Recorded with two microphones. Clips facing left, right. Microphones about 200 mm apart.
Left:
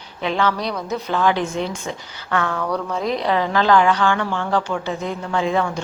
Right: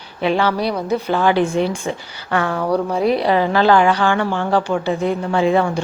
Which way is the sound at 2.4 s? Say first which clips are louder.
Right 5 dB; 30° right (ahead or behind).